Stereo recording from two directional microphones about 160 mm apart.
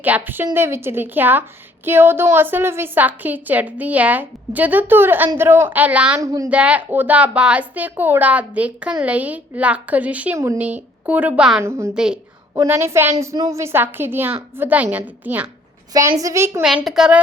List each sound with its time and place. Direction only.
0.0 s speech: 10° right (ahead or behind)
6.1 s a woman's voice: 20° right (ahead or behind)
6.5 s speech: 10° right (ahead or behind)
11.6 s speech: 15° right (ahead or behind)
11.9 s a child's voice: 5° right (ahead or behind)
12.5 s speech: 15° right (ahead or behind)
15.9 s a woman's voice: 20° right (ahead or behind)
16.8 s a child's voice: 5° right (ahead or behind)